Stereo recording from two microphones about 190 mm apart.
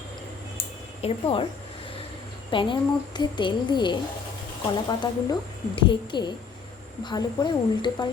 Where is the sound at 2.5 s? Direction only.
25° left (ahead or behind).